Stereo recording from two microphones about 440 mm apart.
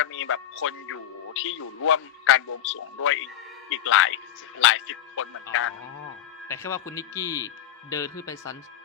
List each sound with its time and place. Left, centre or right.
0.0 s speech: left
6.5 s speech: centre